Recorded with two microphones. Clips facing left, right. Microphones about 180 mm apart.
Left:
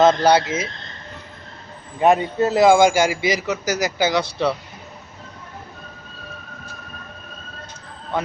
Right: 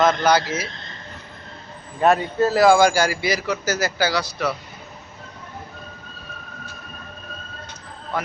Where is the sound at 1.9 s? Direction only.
15° left (ahead or behind).